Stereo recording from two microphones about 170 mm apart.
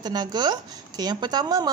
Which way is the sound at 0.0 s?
25° right (ahead or behind).